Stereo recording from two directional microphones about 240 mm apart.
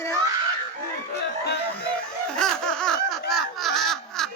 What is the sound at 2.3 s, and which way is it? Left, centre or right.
Laughter, centre.